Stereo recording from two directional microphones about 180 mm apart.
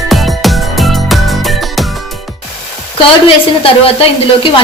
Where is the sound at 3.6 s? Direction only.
30° left (ahead or behind).